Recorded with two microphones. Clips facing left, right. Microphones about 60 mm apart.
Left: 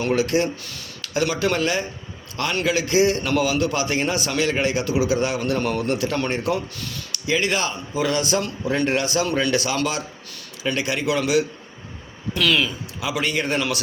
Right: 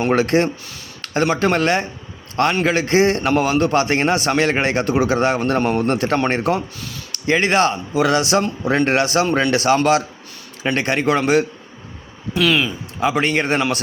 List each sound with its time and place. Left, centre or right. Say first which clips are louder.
0.1 s a man's voice: right 3 dB; right
5.9 s a man's voice: right 5 dB; right
10.8 s a man's voice: right 6 dB; right
12.3 s speech: right 3 dB; centre
13.0 s a man's voice: right 6 dB; right
13.6 s a man's voice: right 4 dB; right